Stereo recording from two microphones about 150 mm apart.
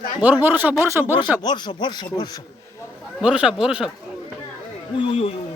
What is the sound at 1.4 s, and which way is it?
Speech, 30° left (ahead or behind).